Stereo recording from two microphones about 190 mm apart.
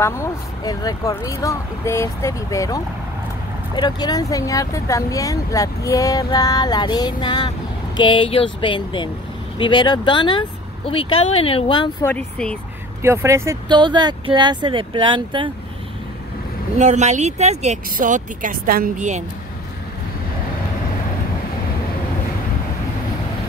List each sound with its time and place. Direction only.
0.0 s speech: 15° left (ahead or behind)
12.0 s speech: 5° left (ahead or behind)
13.0 s speech: 15° right (ahead or behind)
16.7 s speech: 40° right (ahead or behind)